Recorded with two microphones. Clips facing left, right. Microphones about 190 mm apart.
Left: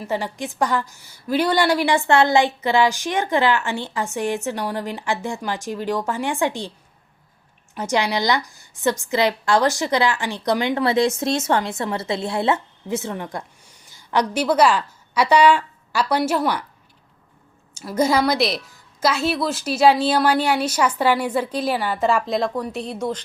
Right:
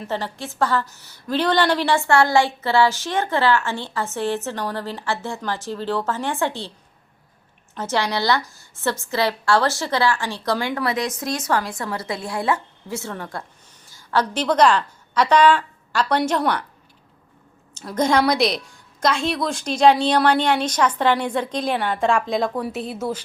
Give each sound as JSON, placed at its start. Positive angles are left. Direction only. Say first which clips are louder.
{"t": 0.0, "sound": "a woman's voice", "louder": "left 2 dB", "side_deg": 10}
{"t": 7.8, "sound": "a woman's voice", "louder": "left 1 dB", "side_deg": 15}
{"t": 17.7, "sound": "a woman's voice", "louder": "even", "side_deg": 10}